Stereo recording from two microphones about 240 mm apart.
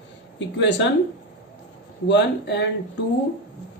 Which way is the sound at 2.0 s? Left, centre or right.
Left.